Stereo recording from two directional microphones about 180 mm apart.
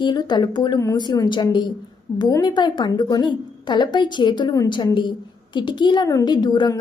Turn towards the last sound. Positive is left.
turn(degrees=25)  # may be behind; listen again after turning